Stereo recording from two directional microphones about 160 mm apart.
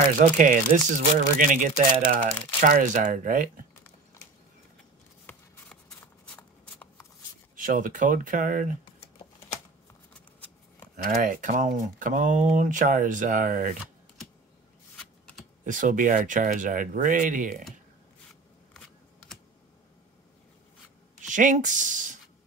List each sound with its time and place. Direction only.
0.2 s speech: 50° right (ahead or behind)
4.2 s a sound: 15° left (ahead or behind)
5.2 s shuffling cards: 5° left (ahead or behind)
7.6 s speech: 55° right (ahead or behind)
11.0 s speech: 55° right (ahead or behind)
15.6 s speech: 55° right (ahead or behind)
18.3 s scissors: centre (ahead or behind)
21.3 s speech: 50° right (ahead or behind)